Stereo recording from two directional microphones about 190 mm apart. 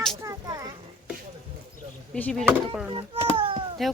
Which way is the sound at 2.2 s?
10° left (ahead or behind).